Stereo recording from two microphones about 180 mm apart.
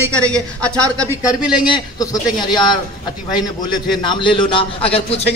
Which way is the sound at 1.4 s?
5° right (ahead or behind).